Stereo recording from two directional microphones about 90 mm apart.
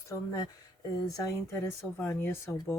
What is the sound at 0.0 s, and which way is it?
Speech, 35° left (ahead or behind).